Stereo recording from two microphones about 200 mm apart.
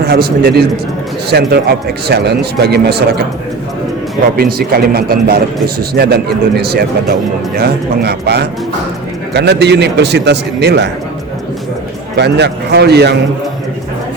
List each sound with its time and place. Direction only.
0.0 s a man's voice: 50° right (ahead or behind)
4.4 s a man's voice: 50° right (ahead or behind)
12.1 s a man's voice: 60° right (ahead or behind)